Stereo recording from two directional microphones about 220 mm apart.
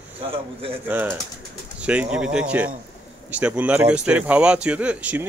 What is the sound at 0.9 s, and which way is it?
Speech, 10° right (ahead or behind).